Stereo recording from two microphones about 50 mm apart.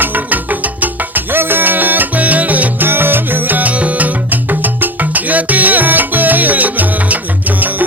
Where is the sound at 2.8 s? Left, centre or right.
Right.